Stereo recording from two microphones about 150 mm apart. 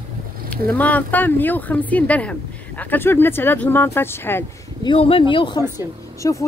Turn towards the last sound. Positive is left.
turn(degrees=25)  # may be behind; listen again after turning